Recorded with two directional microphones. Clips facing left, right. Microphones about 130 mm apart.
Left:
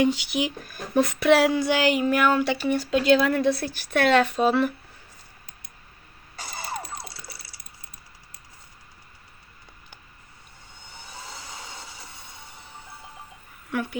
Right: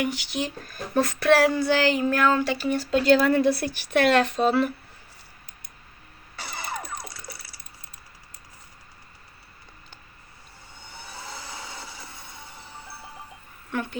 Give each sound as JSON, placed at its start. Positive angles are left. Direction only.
{"t": 0.0, "sound": "speech", "side_deg": 20}
{"t": 6.3, "sound": "vehicle", "side_deg": 40}
{"t": 13.7, "sound": "a sound", "side_deg": 10}